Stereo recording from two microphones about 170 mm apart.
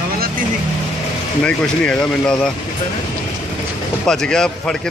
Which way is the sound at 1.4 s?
5° left (ahead or behind).